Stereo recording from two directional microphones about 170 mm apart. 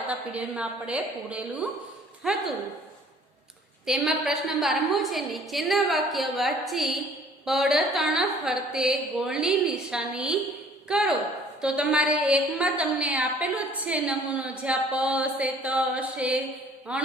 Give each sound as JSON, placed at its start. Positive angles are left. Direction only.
{"t": 0.3, "sound": "a woman's voice", "side_deg": -5}
{"t": 3.8, "sound": "a woman's voice", "side_deg": 0}